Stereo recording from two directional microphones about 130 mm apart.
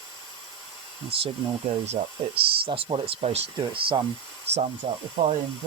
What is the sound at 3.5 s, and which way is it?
Speech, 40° right (ahead or behind).